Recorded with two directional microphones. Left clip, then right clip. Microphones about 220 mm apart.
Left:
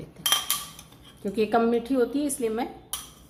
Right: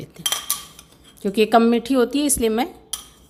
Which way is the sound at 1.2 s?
45° right (ahead or behind).